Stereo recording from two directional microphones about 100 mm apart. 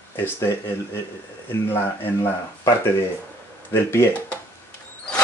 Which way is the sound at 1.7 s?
25° left (ahead or behind).